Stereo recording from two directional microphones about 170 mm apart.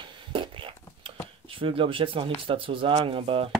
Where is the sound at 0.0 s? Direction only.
30° right (ahead or behind).